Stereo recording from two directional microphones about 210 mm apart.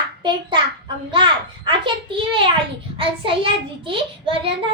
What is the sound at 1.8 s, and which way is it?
A woman's voice, 25° right (ahead or behind).